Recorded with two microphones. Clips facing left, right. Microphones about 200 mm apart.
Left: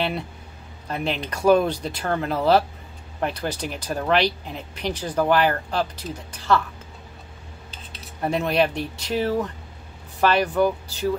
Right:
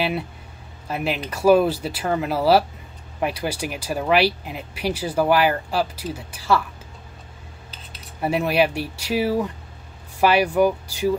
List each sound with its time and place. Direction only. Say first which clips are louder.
0.8 s speech: right 1 dB; 5° right (ahead or behind)
8.2 s speech: right 1 dB; 5° right (ahead or behind)